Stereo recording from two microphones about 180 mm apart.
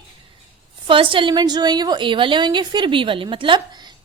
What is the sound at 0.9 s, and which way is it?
A woman's voice, 30° right (ahead or behind).